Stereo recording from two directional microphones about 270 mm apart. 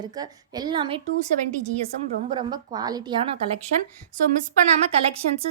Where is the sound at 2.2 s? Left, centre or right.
Centre.